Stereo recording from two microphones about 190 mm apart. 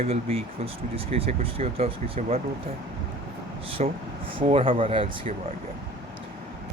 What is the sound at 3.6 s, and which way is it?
Speech, 30° right (ahead or behind).